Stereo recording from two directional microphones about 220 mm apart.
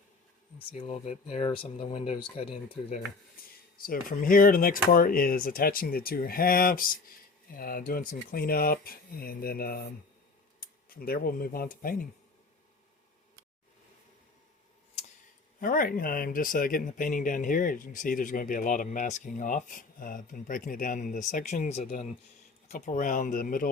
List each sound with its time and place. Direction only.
0.7 s speech: 30° left (ahead or behind)
3.8 s speech: 40° left (ahead or behind)
15.6 s speech: 40° left (ahead or behind)